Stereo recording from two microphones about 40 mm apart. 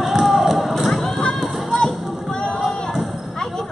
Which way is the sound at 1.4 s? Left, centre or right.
Centre.